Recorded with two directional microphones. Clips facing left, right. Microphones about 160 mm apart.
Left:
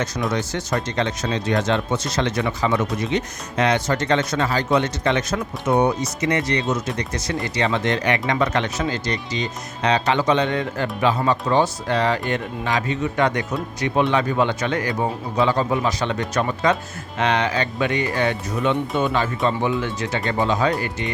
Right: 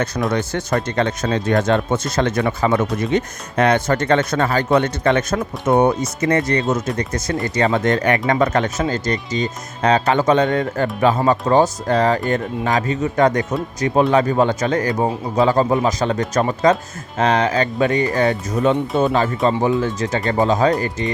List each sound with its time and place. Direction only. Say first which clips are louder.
0.3 s speech: right 3 dB; 55° right (ahead or behind); by 21.1 s 40° right (ahead or behind)